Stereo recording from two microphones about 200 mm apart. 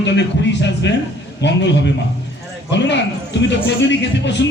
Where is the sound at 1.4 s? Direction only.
60° left (ahead or behind).